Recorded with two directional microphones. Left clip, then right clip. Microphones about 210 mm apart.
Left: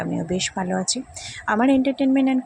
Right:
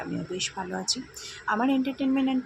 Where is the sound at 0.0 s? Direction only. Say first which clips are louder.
Left 7 dB; 30° left (ahead or behind).